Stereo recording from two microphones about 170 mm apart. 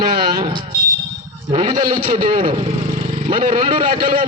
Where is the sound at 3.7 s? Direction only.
30° right (ahead or behind).